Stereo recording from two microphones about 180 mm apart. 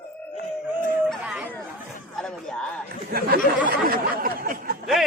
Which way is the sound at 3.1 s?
60° right (ahead or behind).